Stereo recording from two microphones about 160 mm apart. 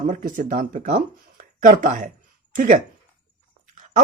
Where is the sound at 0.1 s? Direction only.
55° right (ahead or behind).